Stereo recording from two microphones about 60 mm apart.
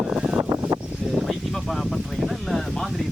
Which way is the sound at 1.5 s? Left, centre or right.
Centre.